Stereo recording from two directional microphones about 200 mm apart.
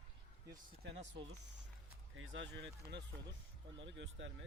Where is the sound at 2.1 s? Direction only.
75° right (ahead or behind).